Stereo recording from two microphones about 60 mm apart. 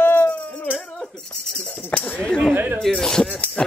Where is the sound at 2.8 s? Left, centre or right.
Centre.